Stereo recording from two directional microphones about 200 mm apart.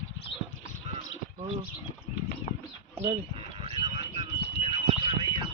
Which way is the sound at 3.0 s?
30° right (ahead or behind).